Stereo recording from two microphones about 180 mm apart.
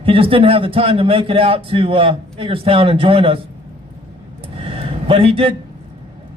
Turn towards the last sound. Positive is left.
turn(degrees=-30)  # may be behind; listen again after turning